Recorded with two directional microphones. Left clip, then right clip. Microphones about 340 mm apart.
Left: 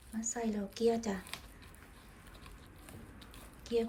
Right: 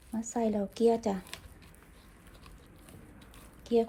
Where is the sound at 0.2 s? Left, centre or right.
Centre.